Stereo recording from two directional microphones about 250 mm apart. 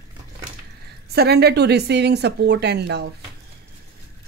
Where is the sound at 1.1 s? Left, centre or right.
Right.